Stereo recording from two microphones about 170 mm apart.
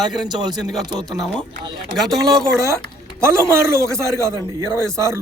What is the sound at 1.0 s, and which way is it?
Speech, 5° left (ahead or behind).